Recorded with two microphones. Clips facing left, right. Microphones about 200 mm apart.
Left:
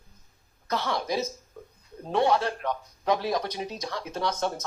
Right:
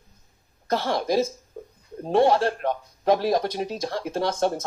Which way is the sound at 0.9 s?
50° right (ahead or behind).